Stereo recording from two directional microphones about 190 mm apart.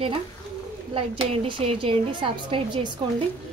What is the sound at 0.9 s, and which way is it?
A woman's voice, 25° right (ahead or behind).